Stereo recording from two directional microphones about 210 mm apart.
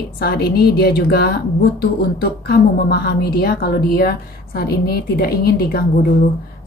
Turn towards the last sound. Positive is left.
turn(degrees=45)  # may be behind; listen again after turning